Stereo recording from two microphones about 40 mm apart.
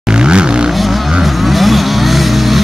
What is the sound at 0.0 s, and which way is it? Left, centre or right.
Vehicle, right.